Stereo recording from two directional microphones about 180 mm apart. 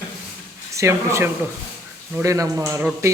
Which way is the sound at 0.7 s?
15° right (ahead or behind).